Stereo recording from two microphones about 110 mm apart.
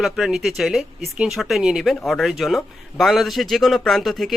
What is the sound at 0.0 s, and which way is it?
Speech, 5° right (ahead or behind).